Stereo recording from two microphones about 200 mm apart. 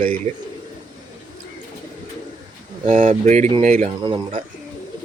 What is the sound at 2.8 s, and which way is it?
Speech, 35° right (ahead or behind).